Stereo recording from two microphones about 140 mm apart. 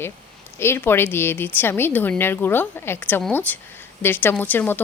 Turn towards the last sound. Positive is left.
turn(degrees=15)  # may be behind; listen again after turning